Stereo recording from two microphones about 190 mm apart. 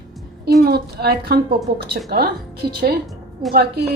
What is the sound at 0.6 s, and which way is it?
A woman's voice, 55° right (ahead or behind).